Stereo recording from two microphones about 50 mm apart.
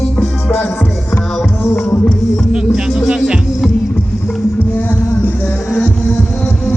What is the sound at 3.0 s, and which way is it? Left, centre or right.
Music, centre.